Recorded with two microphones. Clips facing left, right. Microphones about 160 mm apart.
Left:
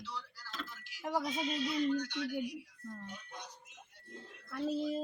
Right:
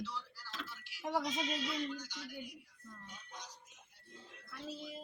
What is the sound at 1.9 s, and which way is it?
Speech, 65° left (ahead or behind).